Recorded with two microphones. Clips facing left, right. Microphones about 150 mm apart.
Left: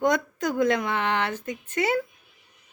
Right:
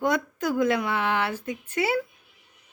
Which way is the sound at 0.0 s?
5° right (ahead or behind).